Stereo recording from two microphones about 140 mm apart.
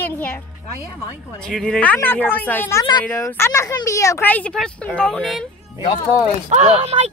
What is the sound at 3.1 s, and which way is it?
Speech, 15° left (ahead or behind).